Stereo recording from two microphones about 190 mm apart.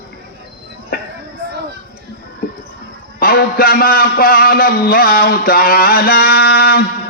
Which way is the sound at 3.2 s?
50° left (ahead or behind).